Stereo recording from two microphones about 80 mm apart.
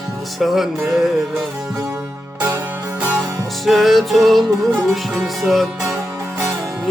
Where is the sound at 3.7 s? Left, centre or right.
Centre.